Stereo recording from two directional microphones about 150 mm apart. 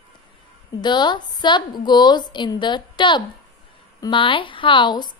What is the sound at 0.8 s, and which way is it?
A woman's voice, 30° left (ahead or behind).